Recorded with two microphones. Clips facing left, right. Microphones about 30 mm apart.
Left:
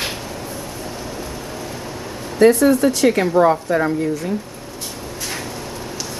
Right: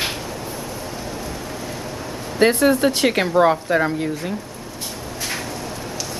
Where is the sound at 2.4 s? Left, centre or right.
Right.